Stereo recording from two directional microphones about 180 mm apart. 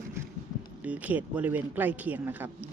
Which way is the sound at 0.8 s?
10° right (ahead or behind).